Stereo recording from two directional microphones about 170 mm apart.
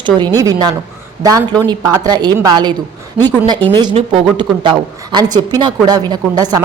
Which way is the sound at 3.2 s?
5° right (ahead or behind).